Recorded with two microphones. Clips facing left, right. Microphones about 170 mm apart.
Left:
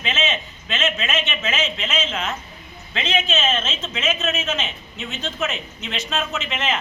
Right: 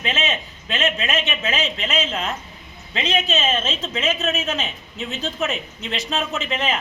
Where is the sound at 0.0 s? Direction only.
35° right (ahead or behind).